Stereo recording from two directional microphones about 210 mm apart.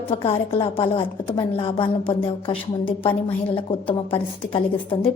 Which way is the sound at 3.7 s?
25° left (ahead or behind).